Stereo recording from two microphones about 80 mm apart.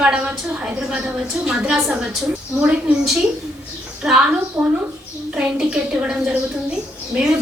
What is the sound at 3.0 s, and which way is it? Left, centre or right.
A woman's voice, centre.